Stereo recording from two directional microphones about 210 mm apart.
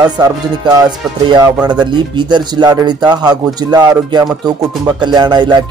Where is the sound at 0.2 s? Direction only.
20° right (ahead or behind).